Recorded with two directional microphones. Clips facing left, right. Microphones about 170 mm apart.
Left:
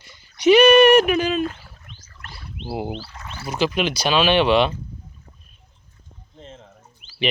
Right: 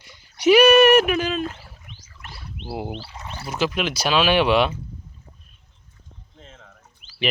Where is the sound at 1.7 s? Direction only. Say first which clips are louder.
Even; 10° right (ahead or behind).